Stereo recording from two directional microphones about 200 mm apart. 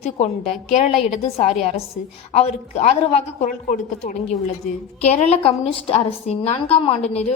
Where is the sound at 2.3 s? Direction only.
30° left (ahead or behind).